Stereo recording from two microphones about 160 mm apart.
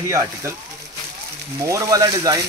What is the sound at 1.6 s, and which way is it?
Speech, 20° right (ahead or behind).